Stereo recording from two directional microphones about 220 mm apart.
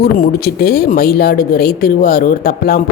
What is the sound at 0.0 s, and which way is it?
Speech, 45° left (ahead or behind).